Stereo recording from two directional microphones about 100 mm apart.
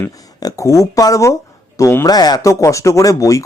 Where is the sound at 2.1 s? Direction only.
40° left (ahead or behind).